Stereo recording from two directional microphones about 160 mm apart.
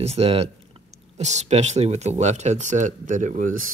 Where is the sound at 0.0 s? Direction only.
40° right (ahead or behind); by 3.7 s 55° right (ahead or behind).